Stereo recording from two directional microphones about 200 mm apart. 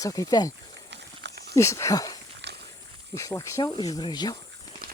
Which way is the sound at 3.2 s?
15° left (ahead or behind).